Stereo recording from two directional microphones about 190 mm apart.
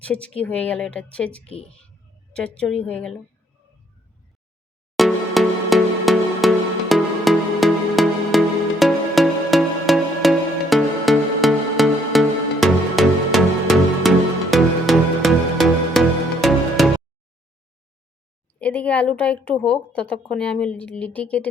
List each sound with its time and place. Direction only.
0.0 s a woman's voice: 5° left (ahead or behind)
1.5 s speech: 30° left (ahead or behind)
2.3 s a woman's voice: 5° left (ahead or behind)
4.9 s music: centre (ahead or behind)
18.6 s a woman's voice: 5° left (ahead or behind)